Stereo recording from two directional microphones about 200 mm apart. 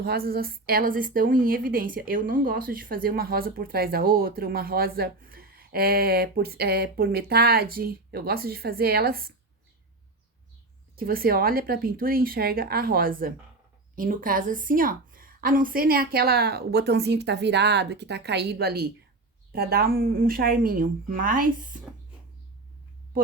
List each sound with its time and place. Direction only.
0.0 s a woman's voice: 50° right (ahead or behind)
10.9 s a woman's voice: 45° right (ahead or behind)